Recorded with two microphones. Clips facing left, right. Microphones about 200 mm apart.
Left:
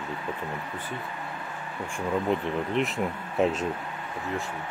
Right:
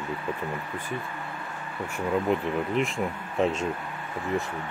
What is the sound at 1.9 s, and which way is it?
Speech, 5° right (ahead or behind).